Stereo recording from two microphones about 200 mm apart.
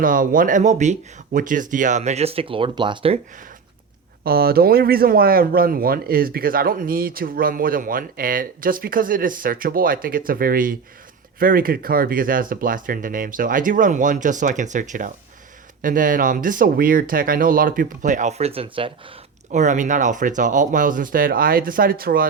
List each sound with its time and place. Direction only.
0.0 s speech: 45° right (ahead or behind); by 3.2 s 25° right (ahead or behind)
4.2 s speech: 50° right (ahead or behind)